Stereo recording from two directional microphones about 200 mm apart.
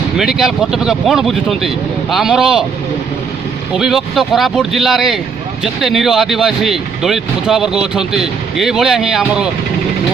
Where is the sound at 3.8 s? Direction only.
Centre (ahead or behind).